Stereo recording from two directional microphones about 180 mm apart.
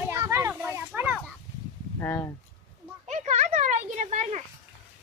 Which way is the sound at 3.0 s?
40° right (ahead or behind).